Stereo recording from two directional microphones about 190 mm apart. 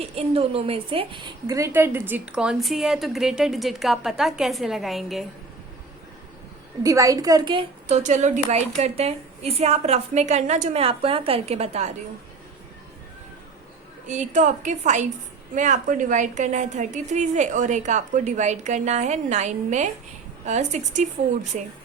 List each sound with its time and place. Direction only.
0.0 s a woman's voice: 30° right (ahead or behind); by 5.2 s centre (ahead or behind)
6.8 s a woman's voice: 15° right (ahead or behind)
7.9 s a woman's voice: 40° right (ahead or behind)
14.1 s a woman's voice: 40° right (ahead or behind)